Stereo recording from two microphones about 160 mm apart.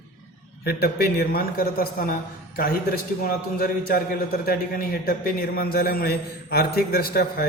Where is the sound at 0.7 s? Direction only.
75° left (ahead or behind).